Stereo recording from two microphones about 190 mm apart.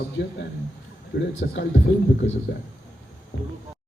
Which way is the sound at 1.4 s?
65° left (ahead or behind).